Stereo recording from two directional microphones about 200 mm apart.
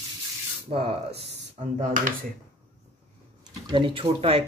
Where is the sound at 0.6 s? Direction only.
30° right (ahead or behind).